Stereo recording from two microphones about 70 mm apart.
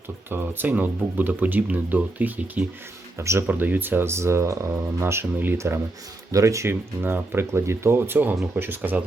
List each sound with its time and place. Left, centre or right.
0.3 s speech: right
3.2 s speech: right
3.4 s speech: right
5.5 s speech: right
6.7 s speech: right